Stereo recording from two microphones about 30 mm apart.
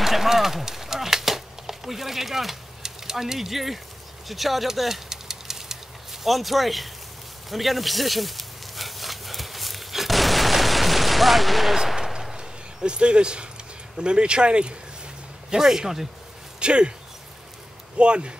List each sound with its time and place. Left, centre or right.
0.0 s a sound: centre
3.3 s speech: centre
5.1 s engine: centre
6.2 s speech: centre
7.4 s a sound: centre
11.7 s machine gun: centre
12.4 s a sound: right
13.9 s speech: right
15.5 s speech: centre
16.5 s speech: right
17.9 s speech: right